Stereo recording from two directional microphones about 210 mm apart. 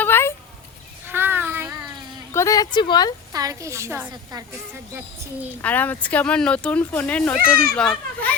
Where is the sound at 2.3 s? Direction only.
15° left (ahead or behind).